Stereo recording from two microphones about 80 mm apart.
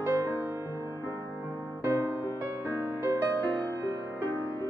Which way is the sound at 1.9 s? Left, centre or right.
Right.